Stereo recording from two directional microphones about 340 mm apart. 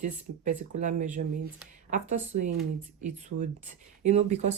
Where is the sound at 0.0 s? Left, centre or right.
Right.